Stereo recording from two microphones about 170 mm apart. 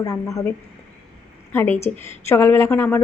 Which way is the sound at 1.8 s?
15° left (ahead or behind).